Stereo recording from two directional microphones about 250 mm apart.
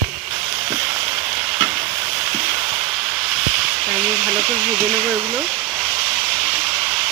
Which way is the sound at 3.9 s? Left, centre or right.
Centre.